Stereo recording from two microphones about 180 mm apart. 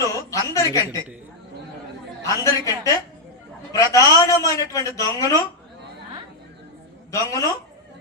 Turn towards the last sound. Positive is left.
turn(degrees=20)  # may be behind; listen again after turning